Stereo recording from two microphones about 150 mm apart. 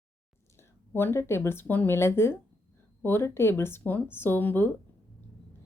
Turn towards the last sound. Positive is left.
turn(degrees=15)  # may be behind; listen again after turning